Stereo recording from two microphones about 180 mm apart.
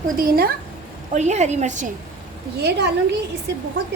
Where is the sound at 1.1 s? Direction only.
40° right (ahead or behind).